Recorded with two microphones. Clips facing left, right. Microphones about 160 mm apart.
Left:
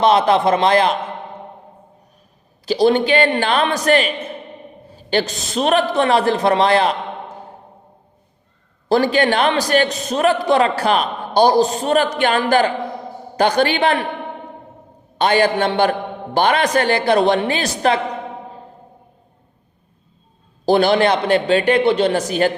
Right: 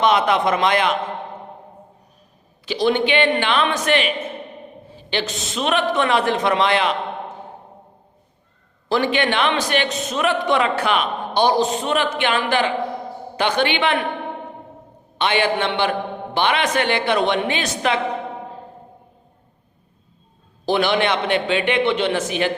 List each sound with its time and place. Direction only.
0.0 s a man's voice: 35° left (ahead or behind)
2.6 s a man's voice: 40° left (ahead or behind)
8.9 s a man's voice: 40° left (ahead or behind)
15.2 s a man's voice: 40° left (ahead or behind)
20.7 s a man's voice: 35° left (ahead or behind)